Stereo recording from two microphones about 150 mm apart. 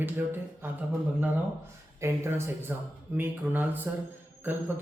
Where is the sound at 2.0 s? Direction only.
20° right (ahead or behind).